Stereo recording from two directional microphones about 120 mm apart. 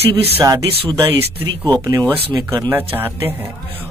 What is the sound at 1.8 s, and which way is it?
Speech, 30° right (ahead or behind).